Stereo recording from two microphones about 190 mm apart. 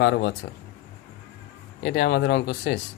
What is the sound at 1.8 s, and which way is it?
Speech, 65° left (ahead or behind).